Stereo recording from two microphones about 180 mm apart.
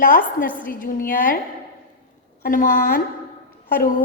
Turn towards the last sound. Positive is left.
turn(degrees=50)  # may be behind; listen again after turning